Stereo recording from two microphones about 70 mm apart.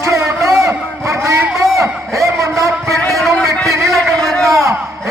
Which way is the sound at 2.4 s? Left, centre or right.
Right.